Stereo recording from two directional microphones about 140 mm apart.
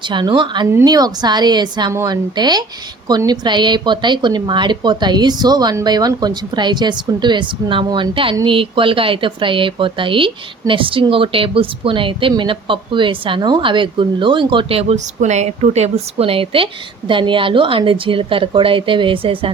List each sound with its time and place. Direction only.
0.1 s a woman's voice: 35° right (ahead or behind)